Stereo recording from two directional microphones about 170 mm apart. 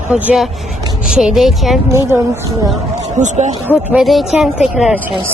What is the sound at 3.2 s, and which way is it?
Speech, 45° right (ahead or behind).